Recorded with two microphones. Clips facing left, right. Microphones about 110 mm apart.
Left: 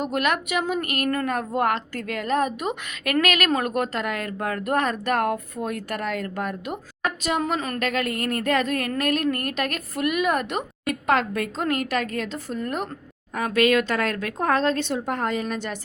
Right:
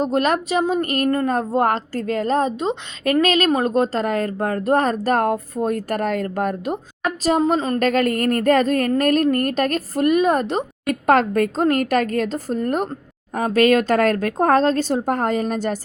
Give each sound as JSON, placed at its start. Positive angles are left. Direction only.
{"t": 0.0, "sound": "speech", "side_deg": -35}
{"t": 7.8, "sound": "speech", "side_deg": -40}
{"t": 11.0, "sound": "a woman's voice", "side_deg": -45}